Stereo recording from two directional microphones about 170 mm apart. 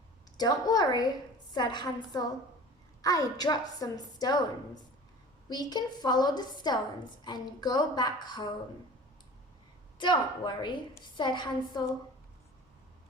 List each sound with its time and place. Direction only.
0.3 s a woman's voice: 25° left (ahead or behind)
5.5 s a woman's voice: 25° left (ahead or behind)
10.0 s a woman's voice: 25° left (ahead or behind)